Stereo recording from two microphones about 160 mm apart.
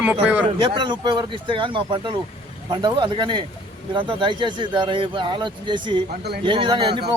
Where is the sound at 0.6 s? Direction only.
30° right (ahead or behind).